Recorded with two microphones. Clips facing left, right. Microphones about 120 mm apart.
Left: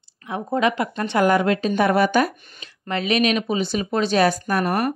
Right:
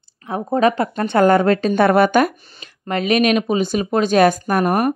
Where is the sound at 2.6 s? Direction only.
45° right (ahead or behind).